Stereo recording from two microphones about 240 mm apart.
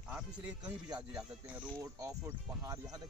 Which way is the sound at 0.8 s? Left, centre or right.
Centre.